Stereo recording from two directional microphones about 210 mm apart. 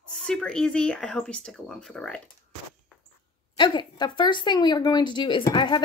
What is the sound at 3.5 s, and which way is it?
Speech, 20° left (ahead or behind).